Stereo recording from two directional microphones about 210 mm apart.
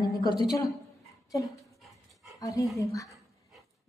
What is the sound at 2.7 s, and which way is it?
Speech, 15° left (ahead or behind).